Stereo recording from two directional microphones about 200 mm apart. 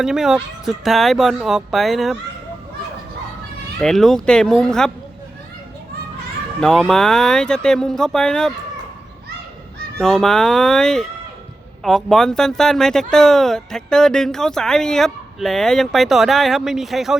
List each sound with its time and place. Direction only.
0.0 s speech: centre (ahead or behind)
3.8 s speech: centre (ahead or behind)
6.6 s speech: centre (ahead or behind)
10.0 s speech: centre (ahead or behind)